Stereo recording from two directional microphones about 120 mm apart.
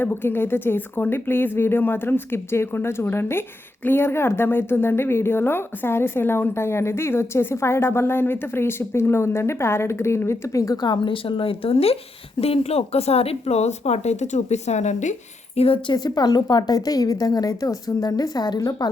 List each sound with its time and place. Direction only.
0.0 s a woman's voice: 15° left (ahead or behind); by 15.1 s 75° left (ahead or behind)
15.5 s speech: 55° left (ahead or behind)
16.0 s a woman's voice: 35° left (ahead or behind)